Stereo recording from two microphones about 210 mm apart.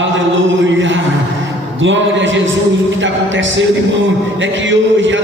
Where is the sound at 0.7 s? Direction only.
60° right (ahead or behind).